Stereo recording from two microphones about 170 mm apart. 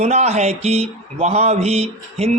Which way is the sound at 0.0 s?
40° right (ahead or behind).